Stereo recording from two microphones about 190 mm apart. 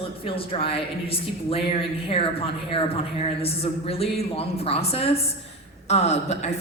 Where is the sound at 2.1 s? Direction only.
30° left (ahead or behind).